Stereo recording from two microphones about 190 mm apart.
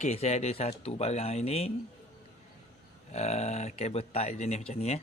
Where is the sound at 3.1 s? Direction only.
35° left (ahead or behind).